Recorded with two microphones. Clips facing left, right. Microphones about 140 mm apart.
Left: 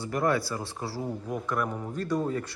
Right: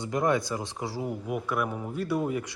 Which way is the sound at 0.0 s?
20° right (ahead or behind).